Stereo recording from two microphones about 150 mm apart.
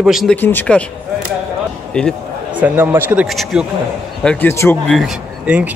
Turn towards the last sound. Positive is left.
turn(degrees=-10)  # may be behind; listen again after turning